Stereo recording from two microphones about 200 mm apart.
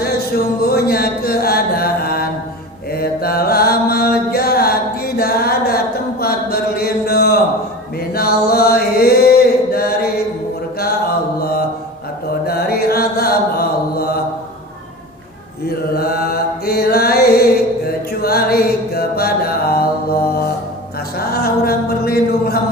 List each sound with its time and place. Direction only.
0.0 s a sound: 50° left (ahead or behind)
2.9 s mantra: 50° left (ahead or behind)
12.5 s mantra: 50° left (ahead or behind)
15.6 s mantra: 50° left (ahead or behind)
21.2 s music: 50° left (ahead or behind)